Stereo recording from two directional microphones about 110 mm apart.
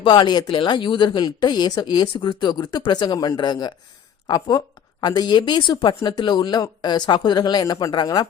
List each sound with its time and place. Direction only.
0.0 s speech: 45° left (ahead or behind)